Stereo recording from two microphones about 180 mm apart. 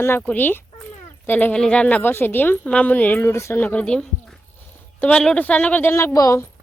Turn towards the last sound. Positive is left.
turn(degrees=15)  # may be behind; listen again after turning